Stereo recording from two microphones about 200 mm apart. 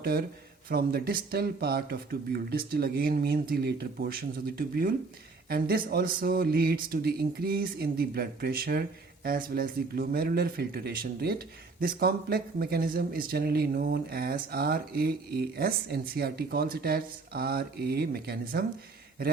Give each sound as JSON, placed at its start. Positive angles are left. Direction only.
{"t": 0.0, "sound": "speech", "side_deg": -50}